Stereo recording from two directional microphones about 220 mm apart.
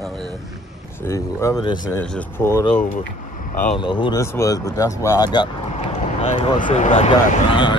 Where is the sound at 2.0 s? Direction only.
5° left (ahead or behind).